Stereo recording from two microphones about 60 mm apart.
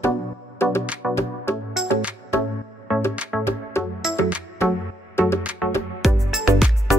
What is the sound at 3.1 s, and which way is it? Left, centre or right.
Music, right.